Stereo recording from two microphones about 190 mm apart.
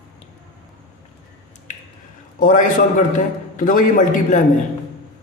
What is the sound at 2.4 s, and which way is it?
A man's voice, 45° left (ahead or behind).